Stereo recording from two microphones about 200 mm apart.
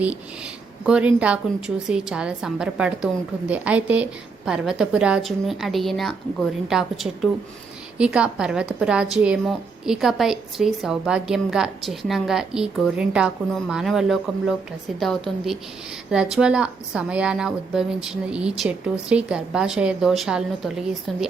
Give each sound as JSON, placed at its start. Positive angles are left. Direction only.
{"t": 0.9, "sound": "a woman's voice", "side_deg": -5}